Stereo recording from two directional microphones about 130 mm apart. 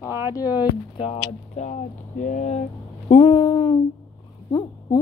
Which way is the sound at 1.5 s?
65° left (ahead or behind).